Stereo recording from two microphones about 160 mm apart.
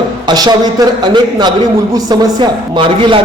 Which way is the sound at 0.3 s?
25° right (ahead or behind).